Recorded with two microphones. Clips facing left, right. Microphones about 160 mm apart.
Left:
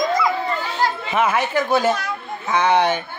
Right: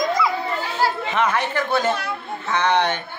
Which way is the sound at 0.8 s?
10° right (ahead or behind).